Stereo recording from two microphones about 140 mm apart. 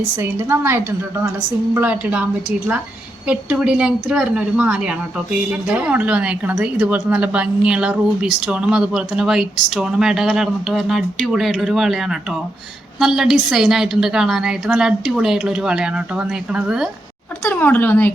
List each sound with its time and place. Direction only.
0.2 s a woman's voice: 15° right (ahead or behind)
17.5 s speech: 15° left (ahead or behind)